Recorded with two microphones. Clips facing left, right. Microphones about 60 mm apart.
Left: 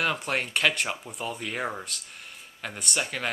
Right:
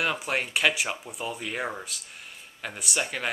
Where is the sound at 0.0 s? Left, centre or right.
Centre.